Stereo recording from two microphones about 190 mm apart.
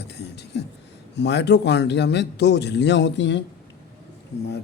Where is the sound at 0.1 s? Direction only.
60° left (ahead or behind).